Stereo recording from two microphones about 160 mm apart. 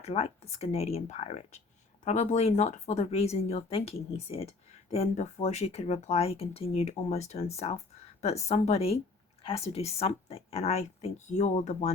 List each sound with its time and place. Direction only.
0.0 s speech: 40° left (ahead or behind)